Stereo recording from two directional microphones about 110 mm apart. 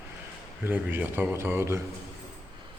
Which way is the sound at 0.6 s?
15° right (ahead or behind).